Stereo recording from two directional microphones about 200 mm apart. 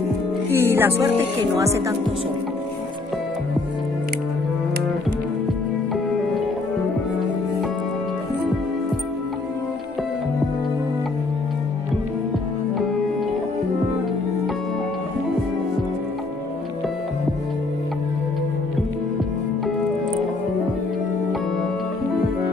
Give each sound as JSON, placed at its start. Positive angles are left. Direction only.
{"t": 0.5, "sound": "speech", "side_deg": -10}